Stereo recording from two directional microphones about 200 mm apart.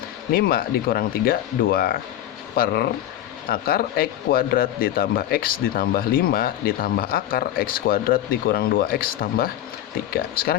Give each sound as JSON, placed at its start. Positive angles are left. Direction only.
{"t": 0.3, "sound": "speech", "side_deg": 50}